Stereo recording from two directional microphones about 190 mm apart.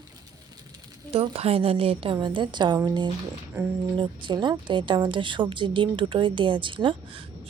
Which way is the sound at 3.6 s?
10° right (ahead or behind).